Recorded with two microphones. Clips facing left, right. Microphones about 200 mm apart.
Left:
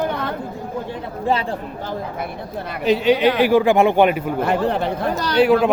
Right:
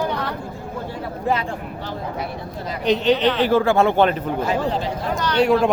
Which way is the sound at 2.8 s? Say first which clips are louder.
Left 2 dB; 5° left (ahead or behind).